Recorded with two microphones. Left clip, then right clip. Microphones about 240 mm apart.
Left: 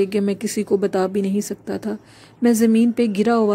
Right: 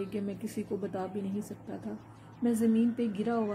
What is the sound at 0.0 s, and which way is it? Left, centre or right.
Speech, left.